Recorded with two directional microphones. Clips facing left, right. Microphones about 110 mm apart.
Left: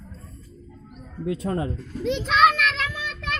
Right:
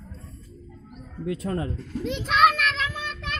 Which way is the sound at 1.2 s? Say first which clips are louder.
Left 2 dB; 25° left (ahead or behind).